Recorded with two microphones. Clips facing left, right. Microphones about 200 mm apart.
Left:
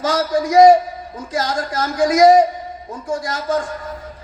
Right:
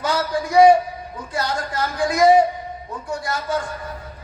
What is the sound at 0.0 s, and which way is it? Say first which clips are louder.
A man's voice: left 4 dB; 90° left.